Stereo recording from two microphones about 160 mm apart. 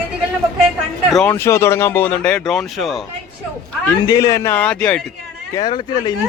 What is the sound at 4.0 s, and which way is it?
Speech, 25° left (ahead or behind).